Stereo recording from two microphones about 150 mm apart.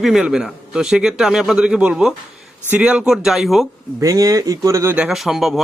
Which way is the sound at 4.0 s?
25° right (ahead or behind).